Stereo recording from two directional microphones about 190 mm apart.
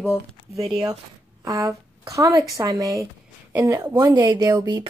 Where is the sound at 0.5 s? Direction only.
20° right (ahead or behind).